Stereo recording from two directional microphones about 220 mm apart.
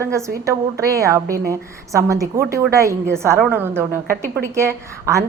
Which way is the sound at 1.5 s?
15° right (ahead or behind).